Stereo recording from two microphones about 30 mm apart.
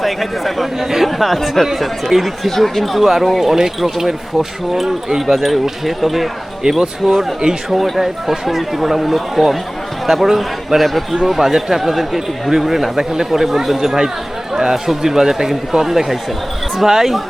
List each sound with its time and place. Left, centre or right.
0.0 s speech: centre
2.6 s speech: centre
5.2 s speech: centre
6.6 s speech: centre